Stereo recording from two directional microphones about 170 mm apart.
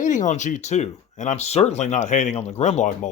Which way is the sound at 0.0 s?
45° left (ahead or behind).